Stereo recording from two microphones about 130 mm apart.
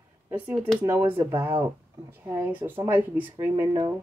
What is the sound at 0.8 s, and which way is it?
Speech, 15° right (ahead or behind).